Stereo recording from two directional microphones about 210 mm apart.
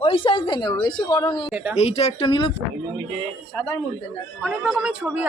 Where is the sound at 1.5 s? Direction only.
5° right (ahead or behind).